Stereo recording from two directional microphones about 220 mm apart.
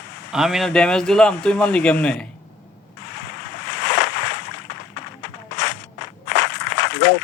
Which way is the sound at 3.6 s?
50° left (ahead or behind).